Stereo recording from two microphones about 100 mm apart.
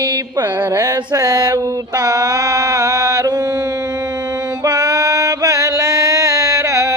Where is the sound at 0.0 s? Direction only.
45° right (ahead or behind).